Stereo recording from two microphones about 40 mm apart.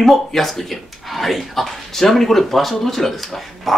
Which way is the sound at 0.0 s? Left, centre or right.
Centre.